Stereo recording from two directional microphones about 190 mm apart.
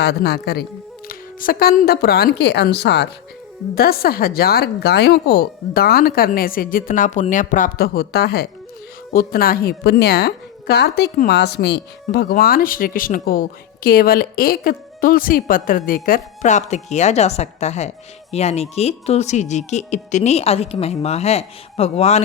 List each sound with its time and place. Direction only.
0.0 s a woman's voice: 55° left (ahead or behind)
3.8 s a woman's voice: 50° left (ahead or behind); by 22.2 s 35° left (ahead or behind)